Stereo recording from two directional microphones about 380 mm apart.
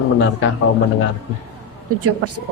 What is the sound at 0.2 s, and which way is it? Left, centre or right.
Speech, left.